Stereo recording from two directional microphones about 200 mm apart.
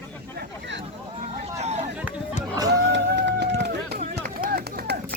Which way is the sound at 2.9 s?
60° right (ahead or behind).